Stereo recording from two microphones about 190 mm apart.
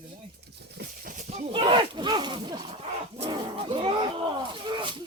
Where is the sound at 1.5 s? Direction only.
25° right (ahead or behind).